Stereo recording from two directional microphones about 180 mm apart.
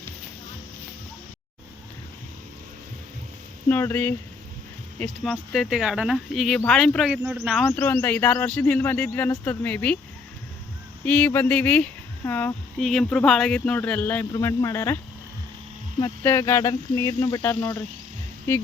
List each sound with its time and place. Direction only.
3.7 s speech: 10° left (ahead or behind)
7.7 s speech: 10° left (ahead or behind)
11.0 s speech: 10° left (ahead or behind)
16.0 s speech: 15° left (ahead or behind)